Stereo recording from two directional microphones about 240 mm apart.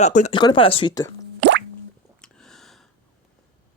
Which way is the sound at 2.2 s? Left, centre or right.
Centre.